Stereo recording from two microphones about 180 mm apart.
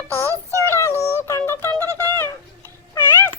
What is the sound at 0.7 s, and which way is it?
Music, 15° left (ahead or behind).